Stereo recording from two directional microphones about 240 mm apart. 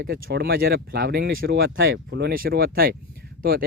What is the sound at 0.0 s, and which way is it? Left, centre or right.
Speech, right.